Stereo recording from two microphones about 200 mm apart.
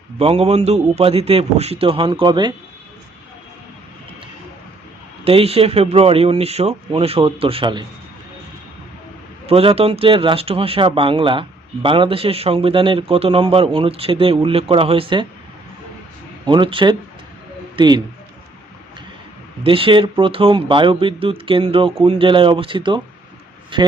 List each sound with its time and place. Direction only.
0.2 s speech: 30° right (ahead or behind)
5.2 s speech: 30° right (ahead or behind)
9.5 s speech: 30° right (ahead or behind)
16.5 s a man's voice: 25° right (ahead or behind)
19.6 s speech: 25° right (ahead or behind)